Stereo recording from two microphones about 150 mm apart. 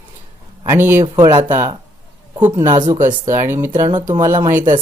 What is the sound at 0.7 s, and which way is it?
Speech, 15° right (ahead or behind).